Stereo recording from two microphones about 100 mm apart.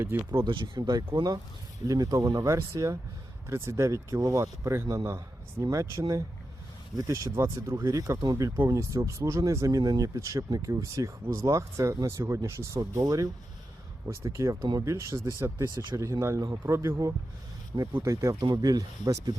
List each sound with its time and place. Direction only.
0.0 s speech: 20° right (ahead or behind)
0.4 s a man's voice: 55° right (ahead or behind); by 6.2 s 30° right (ahead or behind)
7.3 s speech: 30° right (ahead or behind)
13.0 s speech: 40° right (ahead or behind)
14.1 s speech: 30° right (ahead or behind)
15.6 s speech: 45° right (ahead or behind)
16.0 s speech: 30° right (ahead or behind)